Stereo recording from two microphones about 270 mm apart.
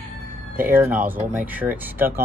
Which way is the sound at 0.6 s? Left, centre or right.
Centre.